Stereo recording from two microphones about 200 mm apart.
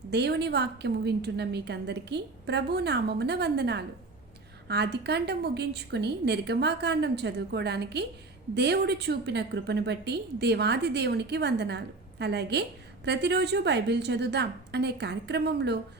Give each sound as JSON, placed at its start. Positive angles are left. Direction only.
{"t": 0.1, "sound": "a woman's voice", "side_deg": -55}